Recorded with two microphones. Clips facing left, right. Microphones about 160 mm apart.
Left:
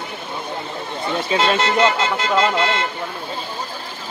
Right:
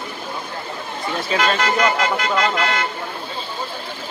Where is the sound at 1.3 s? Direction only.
25° left (ahead or behind).